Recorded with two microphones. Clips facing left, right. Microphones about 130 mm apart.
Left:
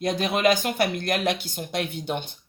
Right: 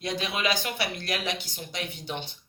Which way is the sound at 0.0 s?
50° left (ahead or behind).